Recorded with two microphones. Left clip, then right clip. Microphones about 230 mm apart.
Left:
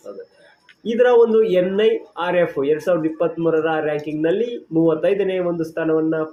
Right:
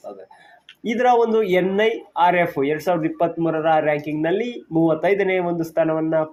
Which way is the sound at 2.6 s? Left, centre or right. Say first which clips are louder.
Left 2 dB; right.